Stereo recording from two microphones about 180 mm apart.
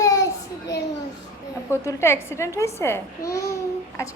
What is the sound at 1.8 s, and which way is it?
A woman's voice, 15° left (ahead or behind).